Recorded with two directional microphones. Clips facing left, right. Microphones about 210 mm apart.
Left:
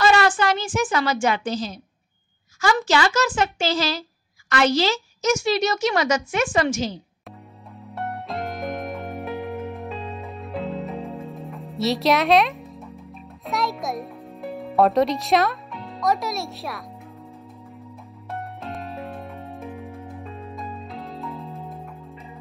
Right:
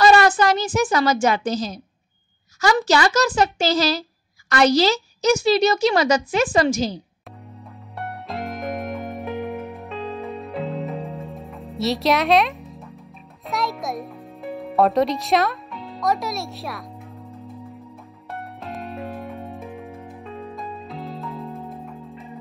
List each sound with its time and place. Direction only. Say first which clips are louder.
0.0 s a child's voice: right 4 dB; 40° right (ahead or behind)
7.9 s music: left 1 dB; centre (ahead or behind)
18.4 s music: right 2 dB; centre (ahead or behind)